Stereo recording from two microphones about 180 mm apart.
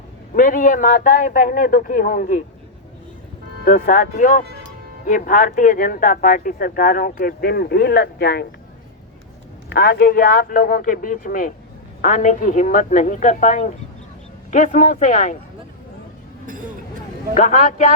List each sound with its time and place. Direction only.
0.3 s speech: 50° left (ahead or behind)
3.6 s speech: 45° left (ahead or behind)
9.6 s speech: 65° left (ahead or behind); by 15.4 s 45° left (ahead or behind)
16.5 s a sound: 45° right (ahead or behind)
17.3 s speech: 45° left (ahead or behind)